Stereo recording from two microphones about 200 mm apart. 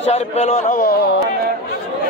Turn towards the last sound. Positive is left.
turn(degrees=40)  # may be behind; listen again after turning